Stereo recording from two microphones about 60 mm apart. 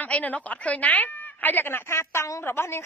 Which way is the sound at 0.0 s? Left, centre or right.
Left.